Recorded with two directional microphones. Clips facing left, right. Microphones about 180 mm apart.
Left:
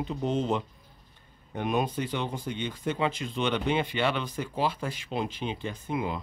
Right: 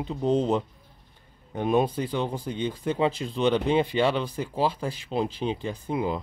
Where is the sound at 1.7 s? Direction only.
30° right (ahead or behind).